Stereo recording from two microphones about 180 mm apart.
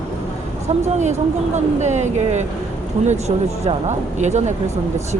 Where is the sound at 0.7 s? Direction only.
40° right (ahead or behind).